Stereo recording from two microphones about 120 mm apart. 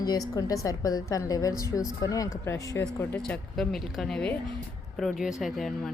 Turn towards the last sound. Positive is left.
turn(degrees=0)  # may be behind; listen again after turning